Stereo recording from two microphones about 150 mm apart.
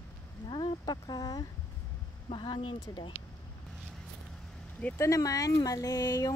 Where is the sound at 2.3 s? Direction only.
35° left (ahead or behind).